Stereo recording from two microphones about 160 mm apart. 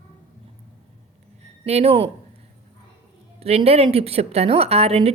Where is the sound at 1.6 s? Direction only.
40° right (ahead or behind).